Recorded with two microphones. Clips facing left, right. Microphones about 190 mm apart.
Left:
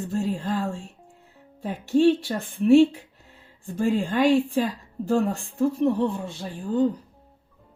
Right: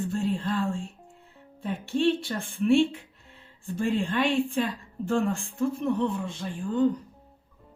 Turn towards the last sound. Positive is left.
turn(degrees=35)  # may be behind; listen again after turning